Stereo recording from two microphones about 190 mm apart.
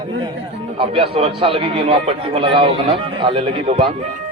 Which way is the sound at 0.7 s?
30° right (ahead or behind).